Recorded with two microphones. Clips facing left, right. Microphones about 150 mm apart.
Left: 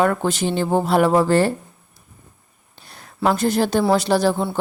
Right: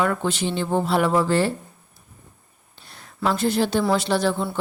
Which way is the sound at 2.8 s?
45° left (ahead or behind).